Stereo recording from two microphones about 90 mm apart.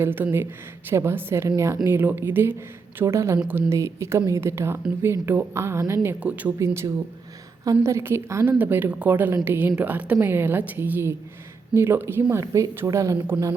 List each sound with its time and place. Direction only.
0.0 s speech: 25° right (ahead or behind)
3.3 s speech: 20° right (ahead or behind)
3.7 s speech: 30° right (ahead or behind)
6.1 s speech: 15° right (ahead or behind)
6.6 s speech: 35° right (ahead or behind)
13.1 s speech: 20° right (ahead or behind)